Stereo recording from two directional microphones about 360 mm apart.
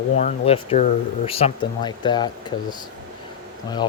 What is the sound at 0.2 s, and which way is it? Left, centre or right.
Speech, centre.